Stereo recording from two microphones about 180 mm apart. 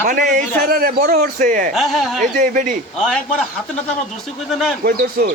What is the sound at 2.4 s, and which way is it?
Speech, 45° right (ahead or behind).